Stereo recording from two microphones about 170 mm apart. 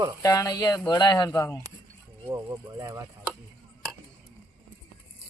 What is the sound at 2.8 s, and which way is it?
Speech, 20° right (ahead or behind).